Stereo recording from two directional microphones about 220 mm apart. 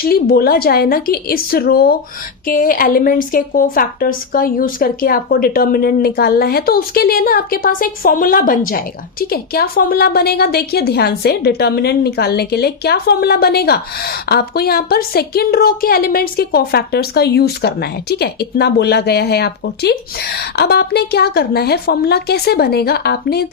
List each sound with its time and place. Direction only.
0.0 s a woman's voice: 40° left (ahead or behind)